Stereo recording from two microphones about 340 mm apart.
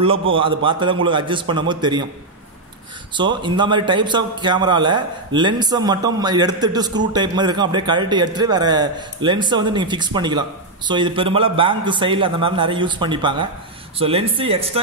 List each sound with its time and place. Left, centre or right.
0.3 s a man's voice: centre
3.2 s a man's voice: centre